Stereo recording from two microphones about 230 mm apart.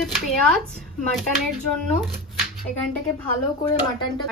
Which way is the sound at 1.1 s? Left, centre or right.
Centre.